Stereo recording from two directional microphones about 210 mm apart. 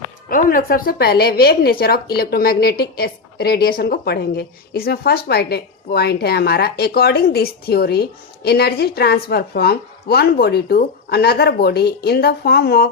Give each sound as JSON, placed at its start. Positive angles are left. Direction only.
{"t": 0.3, "sound": "a woman's voice", "side_deg": 40}